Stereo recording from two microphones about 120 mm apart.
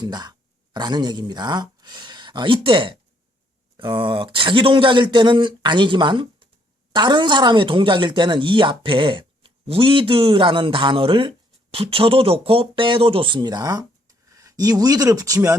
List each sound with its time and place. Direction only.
0.0 s speech: 35° right (ahead or behind)